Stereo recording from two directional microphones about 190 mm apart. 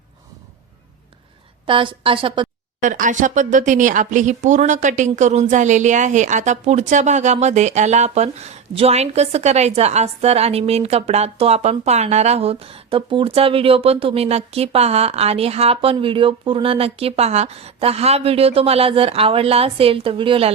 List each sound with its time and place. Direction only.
1.6 s a woman's voice: 25° right (ahead or behind)
2.8 s speech: 40° right (ahead or behind)